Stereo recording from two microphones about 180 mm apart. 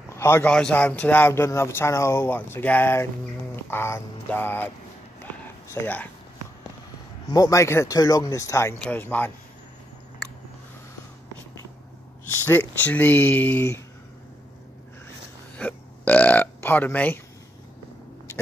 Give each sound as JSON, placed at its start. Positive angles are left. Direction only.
{"t": 0.2, "sound": "a man's voice", "side_deg": 10}
{"t": 5.4, "sound": "a sound", "side_deg": 10}
{"t": 7.3, "sound": "a man's voice", "side_deg": 15}
{"t": 12.4, "sound": "a man's voice", "side_deg": 10}
{"t": 15.5, "sound": "a man's voice", "side_deg": 10}